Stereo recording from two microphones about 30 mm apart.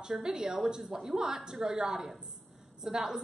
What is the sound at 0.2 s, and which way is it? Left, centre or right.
A woman's voice, right.